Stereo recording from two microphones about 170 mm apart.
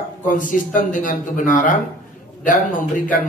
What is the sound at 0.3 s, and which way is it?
A man's voice, 50° left (ahead or behind).